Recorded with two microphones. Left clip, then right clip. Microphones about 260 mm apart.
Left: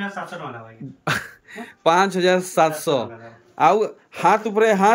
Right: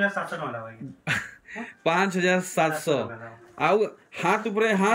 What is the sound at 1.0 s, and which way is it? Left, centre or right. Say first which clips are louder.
Speech: left 4 dB; centre.